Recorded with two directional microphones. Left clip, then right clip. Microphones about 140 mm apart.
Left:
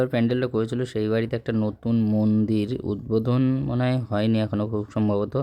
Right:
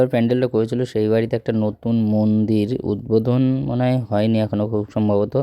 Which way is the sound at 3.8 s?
30° right (ahead or behind).